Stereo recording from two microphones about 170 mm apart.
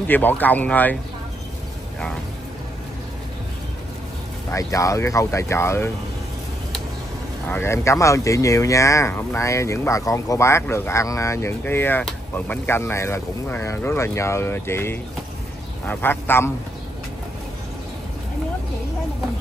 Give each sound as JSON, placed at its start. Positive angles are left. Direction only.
{"t": 0.1, "sound": "speech", "side_deg": 10}
{"t": 4.5, "sound": "speech", "side_deg": 20}
{"t": 7.4, "sound": "speech", "side_deg": 15}